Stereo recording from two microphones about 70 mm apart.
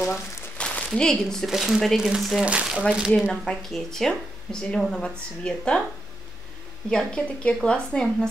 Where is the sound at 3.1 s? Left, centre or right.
Centre.